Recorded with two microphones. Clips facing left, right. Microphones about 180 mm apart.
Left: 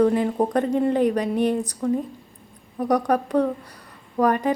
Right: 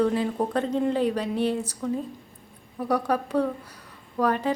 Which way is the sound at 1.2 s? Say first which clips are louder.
Left 4 dB; 15° left (ahead or behind).